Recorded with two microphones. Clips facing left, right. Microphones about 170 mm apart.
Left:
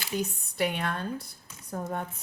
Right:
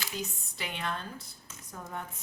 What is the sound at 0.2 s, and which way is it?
A woman's voice, 60° left (ahead or behind).